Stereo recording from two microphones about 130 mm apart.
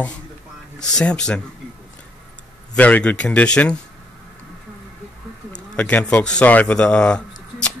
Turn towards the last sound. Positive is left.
turn(degrees=10)  # may be behind; listen again after turning